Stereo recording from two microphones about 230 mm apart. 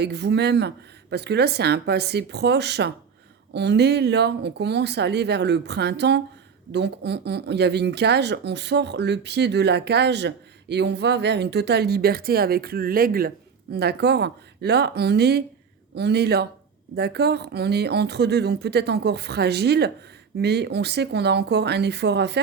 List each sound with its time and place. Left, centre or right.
0.0 s speech: right